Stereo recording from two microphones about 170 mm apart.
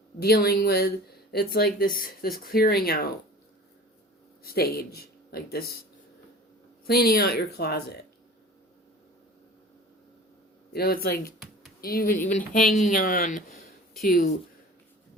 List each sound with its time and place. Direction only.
0.2 s speech: 65° left (ahead or behind)
4.4 s speech: 65° left (ahead or behind)
6.8 s speech: 65° left (ahead or behind)
10.7 s speech: 65° left (ahead or behind)